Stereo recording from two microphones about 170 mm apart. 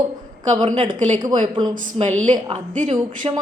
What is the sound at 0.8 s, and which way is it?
Speech, 50° right (ahead or behind).